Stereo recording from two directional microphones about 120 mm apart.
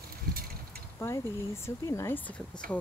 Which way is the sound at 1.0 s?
20° left (ahead or behind).